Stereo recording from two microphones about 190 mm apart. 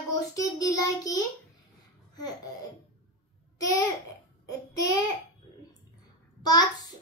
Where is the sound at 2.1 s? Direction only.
20° left (ahead or behind).